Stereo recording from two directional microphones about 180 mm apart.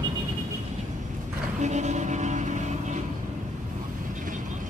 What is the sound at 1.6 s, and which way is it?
Vehicle, 40° right (ahead or behind).